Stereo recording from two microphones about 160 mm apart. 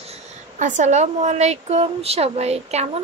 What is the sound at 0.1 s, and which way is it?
A woman's voice, 50° right (ahead or behind).